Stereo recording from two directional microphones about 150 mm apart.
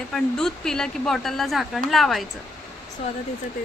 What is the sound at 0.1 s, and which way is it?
Speech, 5° left (ahead or behind).